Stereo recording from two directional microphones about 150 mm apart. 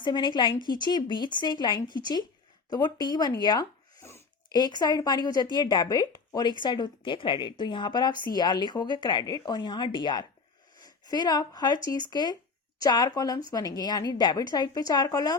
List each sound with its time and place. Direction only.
0.0 s speech: 30° left (ahead or behind)